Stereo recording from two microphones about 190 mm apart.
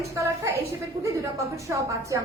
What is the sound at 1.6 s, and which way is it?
Speech, 15° right (ahead or behind).